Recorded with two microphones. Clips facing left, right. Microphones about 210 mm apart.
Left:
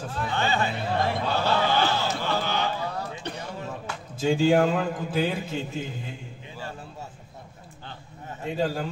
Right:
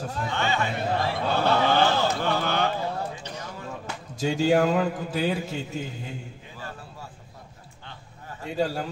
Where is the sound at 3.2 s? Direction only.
60° left (ahead or behind).